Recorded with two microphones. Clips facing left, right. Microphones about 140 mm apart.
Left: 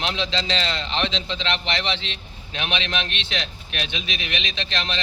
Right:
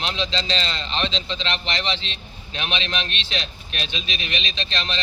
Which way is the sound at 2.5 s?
15° left (ahead or behind).